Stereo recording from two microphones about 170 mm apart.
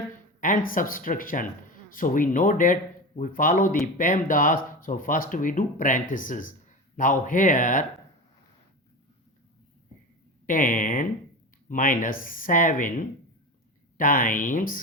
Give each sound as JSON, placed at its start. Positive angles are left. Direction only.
{"t": 0.3, "sound": "speech", "side_deg": 55}
{"t": 10.4, "sound": "speech", "side_deg": 50}